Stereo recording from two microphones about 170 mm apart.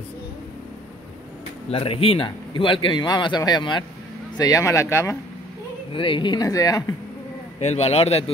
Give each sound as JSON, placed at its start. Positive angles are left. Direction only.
{"t": 1.7, "sound": "a man's voice", "side_deg": 35}
{"t": 5.9, "sound": "a man's voice", "side_deg": 30}
{"t": 7.6, "sound": "a man's voice", "side_deg": 40}